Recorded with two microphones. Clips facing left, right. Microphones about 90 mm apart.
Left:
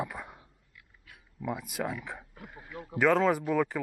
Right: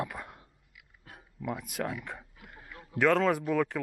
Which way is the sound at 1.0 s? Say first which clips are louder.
Right 6 dB; 40° right (ahead or behind).